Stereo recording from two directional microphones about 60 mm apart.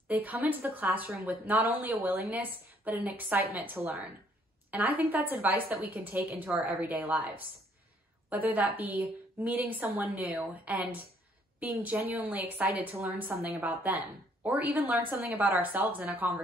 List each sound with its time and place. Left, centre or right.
0.1 s a woman's voice: right